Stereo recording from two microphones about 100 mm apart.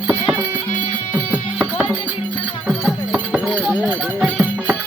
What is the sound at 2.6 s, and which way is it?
Music, 5° right (ahead or behind).